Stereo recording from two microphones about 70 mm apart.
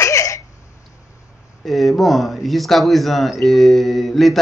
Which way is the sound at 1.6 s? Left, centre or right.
Centre.